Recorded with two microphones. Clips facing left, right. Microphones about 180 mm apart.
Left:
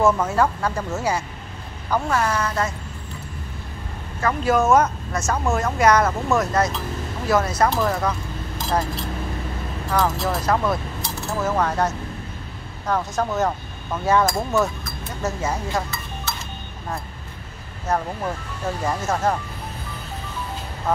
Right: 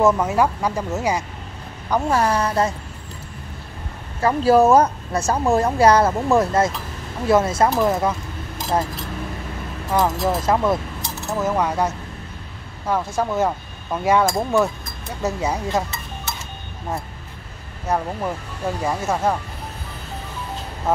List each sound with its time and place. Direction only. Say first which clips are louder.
0.0 s speech: right 2 dB; 15° right (ahead or behind)
1.9 s speech: right 3 dB; 25° right (ahead or behind)
4.2 s speech: right 5 dB; 30° right (ahead or behind)
9.8 s speech: right 3 dB; 20° right (ahead or behind)
17.8 s speech: right 1 dB; 10° right (ahead or behind)